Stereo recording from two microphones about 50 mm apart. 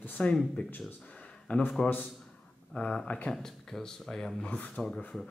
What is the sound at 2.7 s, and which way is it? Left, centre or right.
Speech, left.